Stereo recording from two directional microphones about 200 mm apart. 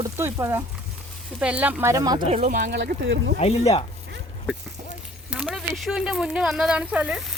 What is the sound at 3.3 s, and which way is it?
Speech, 30° left (ahead or behind).